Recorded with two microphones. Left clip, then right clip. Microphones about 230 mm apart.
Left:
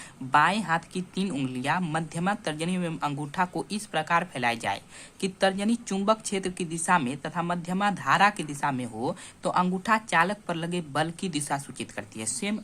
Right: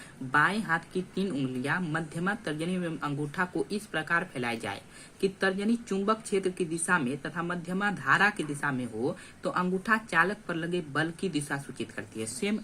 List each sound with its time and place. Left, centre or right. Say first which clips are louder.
0.3 s speech: left 3 dB; left